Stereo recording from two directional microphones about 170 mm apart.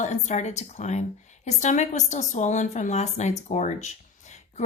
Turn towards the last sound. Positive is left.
turn(degrees=40)  # may be behind; listen again after turning